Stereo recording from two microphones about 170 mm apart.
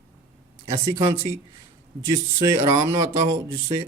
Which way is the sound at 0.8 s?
15° right (ahead or behind).